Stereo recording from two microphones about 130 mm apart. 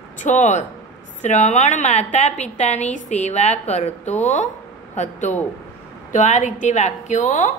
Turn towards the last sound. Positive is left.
turn(degrees=70)  # may be behind; listen again after turning